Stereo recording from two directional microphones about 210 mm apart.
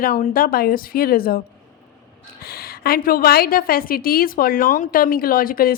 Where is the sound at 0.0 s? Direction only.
45° left (ahead or behind).